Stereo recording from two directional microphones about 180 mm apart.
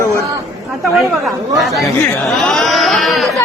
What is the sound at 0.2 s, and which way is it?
Chatter, 15° right (ahead or behind).